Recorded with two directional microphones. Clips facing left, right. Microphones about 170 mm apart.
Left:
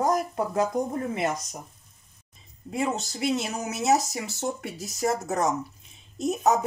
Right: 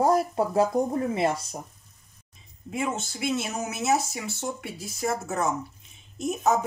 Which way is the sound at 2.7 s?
35° left (ahead or behind).